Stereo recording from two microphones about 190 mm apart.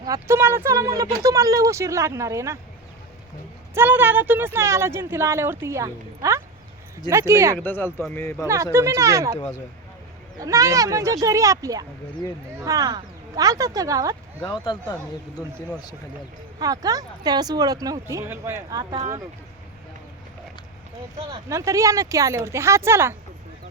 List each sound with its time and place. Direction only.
0.0 s speech: 15° right (ahead or behind)
3.8 s speech: 10° right (ahead or behind)
7.6 s speech: 10° left (ahead or behind)
8.4 s speech: 15° right (ahead or behind)
10.4 s speech: 15° right (ahead or behind)
14.4 s speech: 25° left (ahead or behind)
16.6 s speech: 20° right (ahead or behind)
21.5 s speech: 15° right (ahead or behind)